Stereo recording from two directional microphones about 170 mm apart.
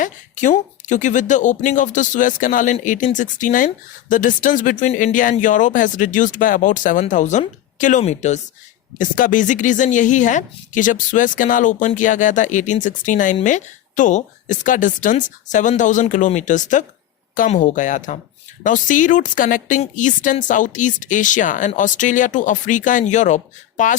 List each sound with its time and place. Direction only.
0.0 s a woman's voice: 45° left (ahead or behind)